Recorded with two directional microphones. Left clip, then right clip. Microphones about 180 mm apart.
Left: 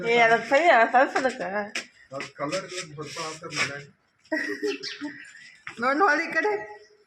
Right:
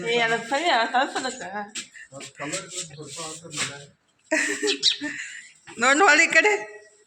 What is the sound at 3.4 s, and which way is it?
Speech, 15° left (ahead or behind).